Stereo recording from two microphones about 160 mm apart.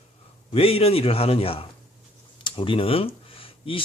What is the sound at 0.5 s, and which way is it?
A man's voice, 40° left (ahead or behind).